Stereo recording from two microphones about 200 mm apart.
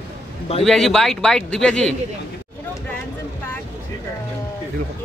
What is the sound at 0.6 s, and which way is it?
Speech, centre (ahead or behind).